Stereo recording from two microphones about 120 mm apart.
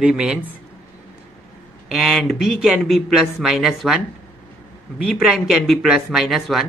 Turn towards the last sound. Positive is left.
turn(degrees=0)  # may be behind; listen again after turning